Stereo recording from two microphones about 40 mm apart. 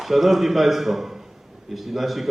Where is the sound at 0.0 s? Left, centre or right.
Centre.